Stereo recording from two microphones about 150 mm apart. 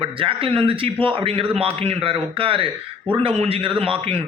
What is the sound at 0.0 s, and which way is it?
A man's voice, 35° right (ahead or behind).